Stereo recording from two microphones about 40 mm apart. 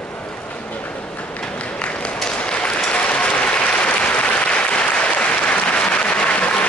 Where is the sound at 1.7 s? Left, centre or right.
Left.